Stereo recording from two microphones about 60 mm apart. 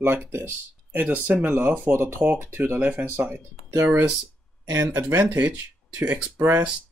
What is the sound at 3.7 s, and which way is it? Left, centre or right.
Speech, right.